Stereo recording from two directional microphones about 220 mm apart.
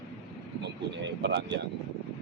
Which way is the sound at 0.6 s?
50° right (ahead or behind).